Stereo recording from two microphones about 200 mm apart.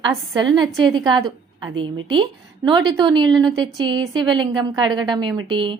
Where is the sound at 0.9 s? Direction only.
20° right (ahead or behind).